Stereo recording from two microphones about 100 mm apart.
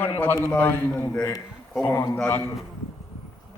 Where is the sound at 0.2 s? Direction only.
20° left (ahead or behind).